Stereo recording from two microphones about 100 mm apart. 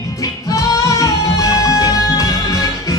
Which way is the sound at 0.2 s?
35° left (ahead or behind).